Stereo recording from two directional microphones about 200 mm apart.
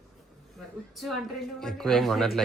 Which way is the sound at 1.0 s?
Centre (ahead or behind).